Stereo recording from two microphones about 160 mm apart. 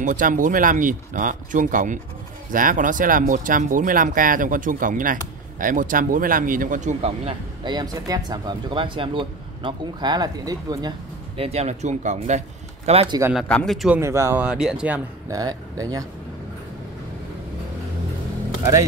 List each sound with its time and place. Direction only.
0.0 s speech: 55° right (ahead or behind); by 7.7 s 40° right (ahead or behind)
7.7 s speech: 25° right (ahead or behind)
11.3 s a man's voice: 40° right (ahead or behind)
13.3 s speech: 5° left (ahead or behind)
13.9 s speech: 20° right (ahead or behind)
14.4 s speech: 5° right (ahead or behind)
15.2 s speech: 20° right (ahead or behind)